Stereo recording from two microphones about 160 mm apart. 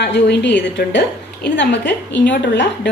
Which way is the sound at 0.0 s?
90° left.